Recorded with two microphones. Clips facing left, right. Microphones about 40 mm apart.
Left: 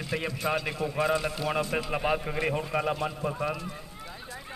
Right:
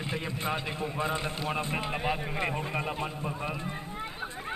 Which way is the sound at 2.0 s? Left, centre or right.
Centre.